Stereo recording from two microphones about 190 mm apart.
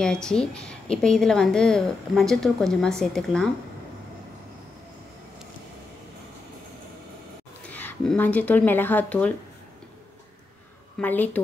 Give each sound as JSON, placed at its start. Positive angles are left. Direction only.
{"t": 0.0, "sound": "a woman's voice", "side_deg": 5}
{"t": 7.7, "sound": "speech", "side_deg": 5}
{"t": 11.0, "sound": "speech", "side_deg": 10}